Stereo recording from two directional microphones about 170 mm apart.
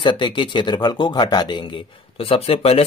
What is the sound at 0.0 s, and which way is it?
Speech, 25° left (ahead or behind).